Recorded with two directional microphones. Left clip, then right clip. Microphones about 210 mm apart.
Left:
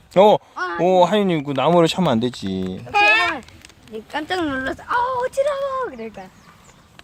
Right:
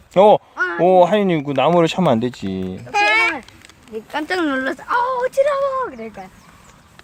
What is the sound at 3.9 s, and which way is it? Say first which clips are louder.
Speech: right 2 dB; 10° right (ahead or behind).